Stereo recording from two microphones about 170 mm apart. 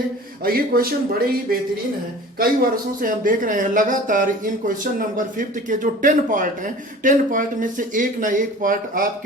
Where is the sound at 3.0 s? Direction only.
55° right (ahead or behind).